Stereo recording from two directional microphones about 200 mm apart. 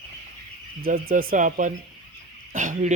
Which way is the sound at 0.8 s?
45° right (ahead or behind).